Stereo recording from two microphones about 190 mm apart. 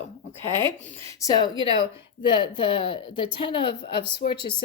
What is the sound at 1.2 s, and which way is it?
Speech, 20° left (ahead or behind).